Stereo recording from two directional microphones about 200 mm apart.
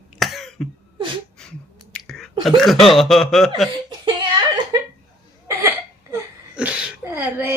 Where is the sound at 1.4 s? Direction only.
5° left (ahead or behind).